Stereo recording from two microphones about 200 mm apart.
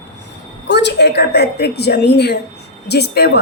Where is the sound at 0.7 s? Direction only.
60° left (ahead or behind).